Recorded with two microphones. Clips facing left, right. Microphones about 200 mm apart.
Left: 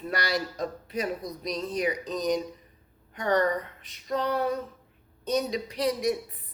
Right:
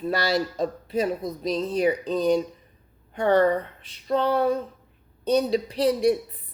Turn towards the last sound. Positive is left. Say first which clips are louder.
# right 6 dB
turn(degrees=-30)  # may be behind; listen again after turning